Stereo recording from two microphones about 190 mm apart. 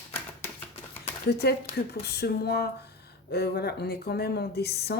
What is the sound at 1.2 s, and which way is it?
Speech, 60° left (ahead or behind).